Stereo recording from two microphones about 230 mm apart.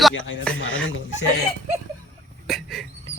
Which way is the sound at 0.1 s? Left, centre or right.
Left.